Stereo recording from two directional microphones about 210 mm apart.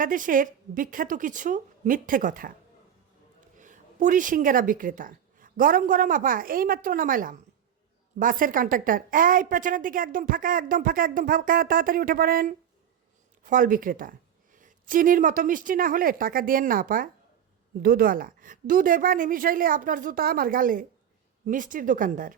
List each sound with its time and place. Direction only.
0.0 s a woman's voice: 40° right (ahead or behind)
3.6 s a woman's voice: 35° right (ahead or behind)